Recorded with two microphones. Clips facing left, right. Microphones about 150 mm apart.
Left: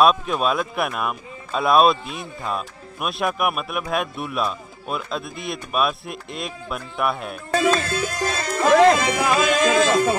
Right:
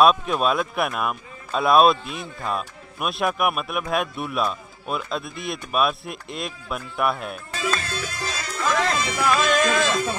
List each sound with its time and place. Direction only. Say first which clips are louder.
0.0 s a man's voice: even; centre (ahead or behind)
7.5 s music: left 9 dB; 50° left (ahead or behind)